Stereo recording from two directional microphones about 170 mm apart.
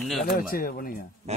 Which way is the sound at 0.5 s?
60° left (ahead or behind).